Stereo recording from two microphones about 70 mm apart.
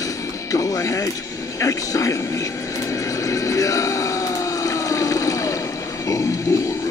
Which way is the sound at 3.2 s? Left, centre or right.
Left.